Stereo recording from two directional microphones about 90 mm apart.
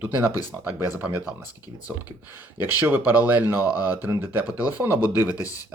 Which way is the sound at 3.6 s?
45° left (ahead or behind).